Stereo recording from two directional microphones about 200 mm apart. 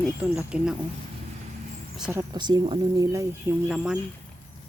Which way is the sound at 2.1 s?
15° right (ahead or behind).